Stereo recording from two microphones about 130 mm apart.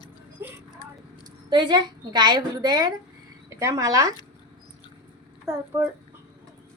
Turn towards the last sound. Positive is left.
turn(degrees=-20)  # may be behind; listen again after turning